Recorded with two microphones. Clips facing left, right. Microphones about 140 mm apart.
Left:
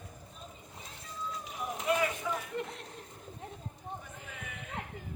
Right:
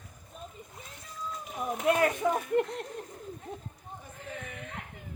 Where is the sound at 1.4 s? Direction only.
60° right (ahead or behind).